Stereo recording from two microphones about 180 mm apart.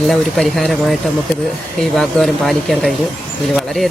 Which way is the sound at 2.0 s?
Centre (ahead or behind).